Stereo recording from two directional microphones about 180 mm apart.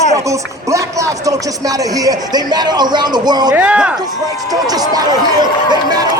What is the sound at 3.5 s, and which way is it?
Speech, 5° right (ahead or behind).